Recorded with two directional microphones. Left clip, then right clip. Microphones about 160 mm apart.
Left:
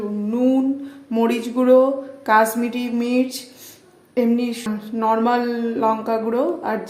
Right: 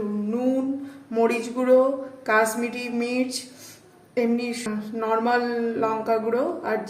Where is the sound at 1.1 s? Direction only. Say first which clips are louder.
Left 2 dB; 40° left (ahead or behind).